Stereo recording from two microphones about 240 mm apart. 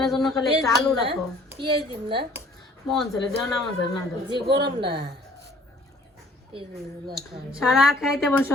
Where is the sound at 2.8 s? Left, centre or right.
Centre.